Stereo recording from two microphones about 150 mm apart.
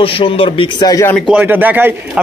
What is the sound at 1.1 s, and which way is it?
Speech, 5° right (ahead or behind).